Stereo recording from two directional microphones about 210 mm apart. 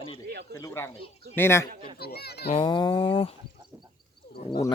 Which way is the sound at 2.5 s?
25° left (ahead or behind).